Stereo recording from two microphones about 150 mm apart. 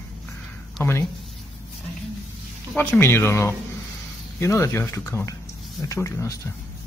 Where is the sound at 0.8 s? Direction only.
15° left (ahead or behind).